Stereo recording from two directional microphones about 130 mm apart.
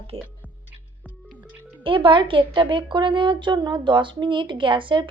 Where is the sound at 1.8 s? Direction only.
40° right (ahead or behind).